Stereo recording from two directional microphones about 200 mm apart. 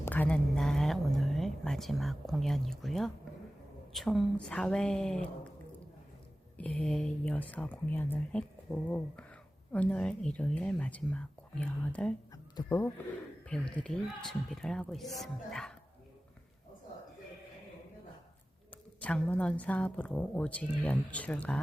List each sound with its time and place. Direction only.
0.0 s a sound: 10° left (ahead or behind)
3.9 s speech: centre (ahead or behind)
6.6 s a woman's voice: 5° left (ahead or behind)
18.7 s a woman's voice: 5° left (ahead or behind)